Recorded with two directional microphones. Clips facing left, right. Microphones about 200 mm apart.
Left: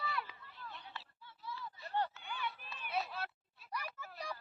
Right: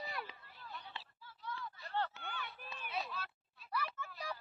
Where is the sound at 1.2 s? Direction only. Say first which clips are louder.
Right 1 dB; 5° left (ahead or behind).